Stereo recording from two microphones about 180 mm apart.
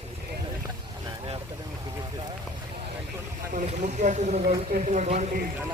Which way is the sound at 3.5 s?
40° right (ahead or behind).